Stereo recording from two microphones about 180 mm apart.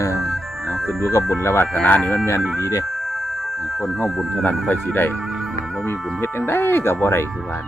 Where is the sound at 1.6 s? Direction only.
5° left (ahead or behind).